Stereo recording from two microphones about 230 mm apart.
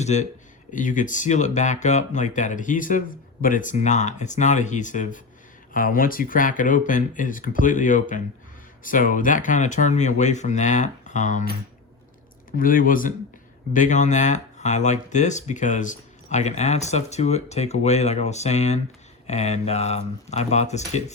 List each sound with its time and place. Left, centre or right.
0.0 s speech: left